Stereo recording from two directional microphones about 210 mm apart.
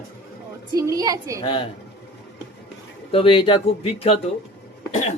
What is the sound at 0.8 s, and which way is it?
Speech, 15° right (ahead or behind).